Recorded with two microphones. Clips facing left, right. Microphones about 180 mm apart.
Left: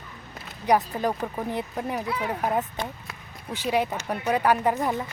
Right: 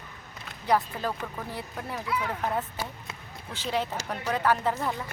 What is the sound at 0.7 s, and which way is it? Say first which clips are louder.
Speech: left 4 dB; 15° left (ahead or behind).